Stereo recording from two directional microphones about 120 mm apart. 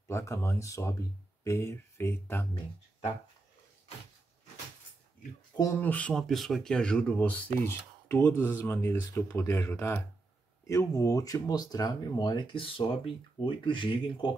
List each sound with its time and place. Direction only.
0.1 s speech: 25° left (ahead or behind)
5.8 s speech: 15° left (ahead or behind); by 14.3 s 45° left (ahead or behind)